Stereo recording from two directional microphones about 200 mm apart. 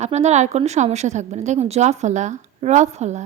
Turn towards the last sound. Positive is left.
turn(degrees=-35)  # may be behind; listen again after turning